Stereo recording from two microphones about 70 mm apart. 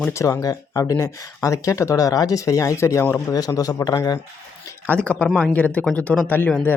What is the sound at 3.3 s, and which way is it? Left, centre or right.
Speech, left.